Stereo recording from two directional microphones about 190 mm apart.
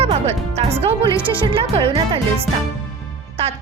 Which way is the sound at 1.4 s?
30° right (ahead or behind).